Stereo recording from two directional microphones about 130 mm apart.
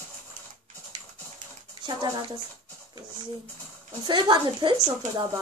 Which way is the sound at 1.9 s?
35° right (ahead or behind).